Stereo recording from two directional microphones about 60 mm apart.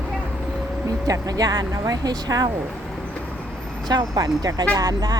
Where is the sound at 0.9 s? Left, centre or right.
Right.